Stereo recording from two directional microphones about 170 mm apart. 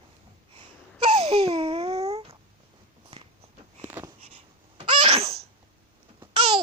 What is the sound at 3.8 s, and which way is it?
Wheeze, 15° right (ahead or behind).